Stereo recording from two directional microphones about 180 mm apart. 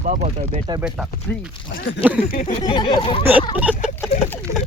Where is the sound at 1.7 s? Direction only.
85° left.